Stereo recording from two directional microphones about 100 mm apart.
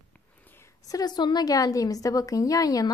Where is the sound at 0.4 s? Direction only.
20° left (ahead or behind).